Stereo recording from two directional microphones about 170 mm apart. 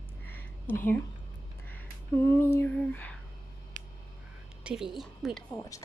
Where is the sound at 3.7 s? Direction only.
50° right (ahead or behind).